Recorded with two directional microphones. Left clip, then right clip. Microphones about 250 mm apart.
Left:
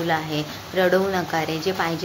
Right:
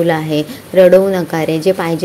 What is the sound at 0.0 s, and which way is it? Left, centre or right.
A woman's voice, right.